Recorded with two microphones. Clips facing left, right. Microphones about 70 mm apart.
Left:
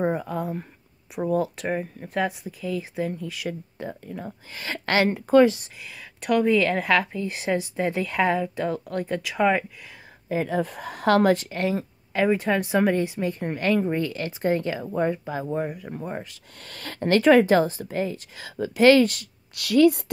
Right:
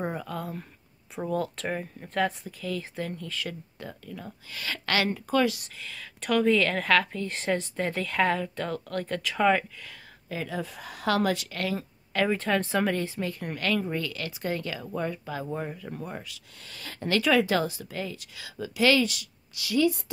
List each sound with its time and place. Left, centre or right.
0.0 s a woman's voice: left
3.7 s speech: left
5.8 s a woman's voice: centre
10.2 s speech: left
10.6 s a woman's voice: left
11.5 s speech: left
15.4 s a woman's voice: centre
16.1 s a woman's voice: left
16.6 s a woman's voice: left
17.1 s a woman's voice: left
19.6 s a woman's voice: left